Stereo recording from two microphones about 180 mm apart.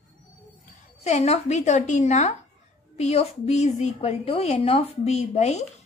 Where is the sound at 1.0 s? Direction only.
35° left (ahead or behind).